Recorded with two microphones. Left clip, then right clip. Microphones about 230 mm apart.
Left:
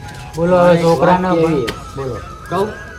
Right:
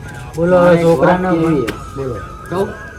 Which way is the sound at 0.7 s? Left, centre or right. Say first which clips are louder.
Right 2 dB; centre.